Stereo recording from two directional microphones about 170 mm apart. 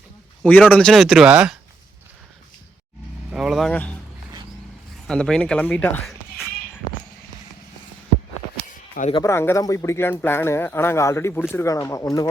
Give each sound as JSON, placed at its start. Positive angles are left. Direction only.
{"t": 0.7, "sound": "speech", "side_deg": 5}
{"t": 3.2, "sound": "speech", "side_deg": -5}
{"t": 5.0, "sound": "speech", "side_deg": 5}
{"t": 8.7, "sound": "a sound", "side_deg": 50}
{"t": 9.2, "sound": "speech", "side_deg": 15}